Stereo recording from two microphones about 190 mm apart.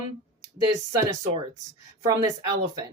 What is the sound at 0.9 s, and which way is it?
A woman's voice, 15° right (ahead or behind).